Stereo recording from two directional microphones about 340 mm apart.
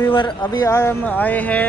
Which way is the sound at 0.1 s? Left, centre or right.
Centre.